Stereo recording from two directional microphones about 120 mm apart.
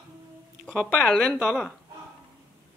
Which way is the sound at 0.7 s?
5° right (ahead or behind).